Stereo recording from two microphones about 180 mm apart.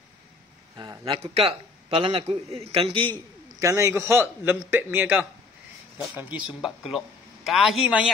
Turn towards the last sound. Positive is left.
turn(degrees=0)  # may be behind; listen again after turning